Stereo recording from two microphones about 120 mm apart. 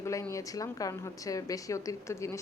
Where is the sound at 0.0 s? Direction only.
25° left (ahead or behind).